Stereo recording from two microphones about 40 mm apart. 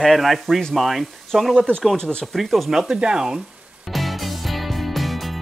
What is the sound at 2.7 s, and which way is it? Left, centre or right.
Speech, centre.